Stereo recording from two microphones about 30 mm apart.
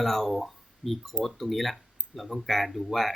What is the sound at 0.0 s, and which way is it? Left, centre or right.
Speech, centre.